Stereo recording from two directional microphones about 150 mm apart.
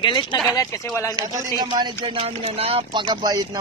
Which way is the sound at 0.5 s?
20° left (ahead or behind).